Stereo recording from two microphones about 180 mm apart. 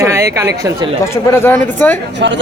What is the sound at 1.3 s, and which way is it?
Speech, 10° left (ahead or behind).